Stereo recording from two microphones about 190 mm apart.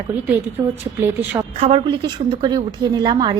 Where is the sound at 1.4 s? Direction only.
25° right (ahead or behind).